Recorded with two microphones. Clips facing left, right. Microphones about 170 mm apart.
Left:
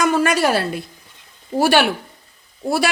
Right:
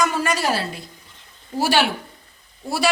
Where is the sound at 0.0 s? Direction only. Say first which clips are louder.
Left 5 dB; 55° left (ahead or behind).